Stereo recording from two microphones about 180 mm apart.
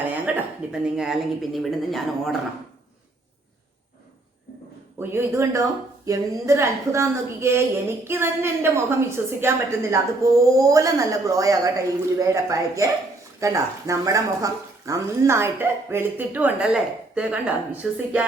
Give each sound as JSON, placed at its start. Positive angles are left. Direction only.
{"t": 0.3, "sound": "speech", "side_deg": -5}
{"t": 4.9, "sound": "a woman's voice", "side_deg": -15}